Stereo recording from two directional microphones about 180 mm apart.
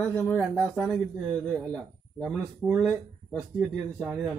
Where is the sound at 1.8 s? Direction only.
Centre (ahead or behind).